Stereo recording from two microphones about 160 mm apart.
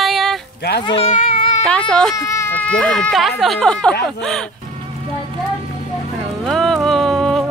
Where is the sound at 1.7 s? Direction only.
5° left (ahead or behind).